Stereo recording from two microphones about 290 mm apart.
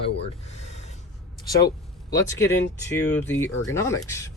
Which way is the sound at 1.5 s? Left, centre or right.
Centre.